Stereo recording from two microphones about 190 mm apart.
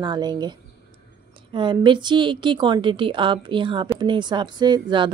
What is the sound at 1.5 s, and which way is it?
A woman's voice, 25° right (ahead or behind).